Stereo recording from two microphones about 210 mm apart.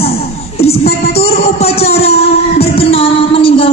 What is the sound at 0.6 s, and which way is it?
Music, 30° left (ahead or behind).